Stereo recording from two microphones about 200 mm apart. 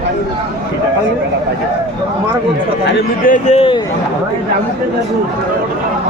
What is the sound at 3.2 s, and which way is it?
Speech, 40° left (ahead or behind).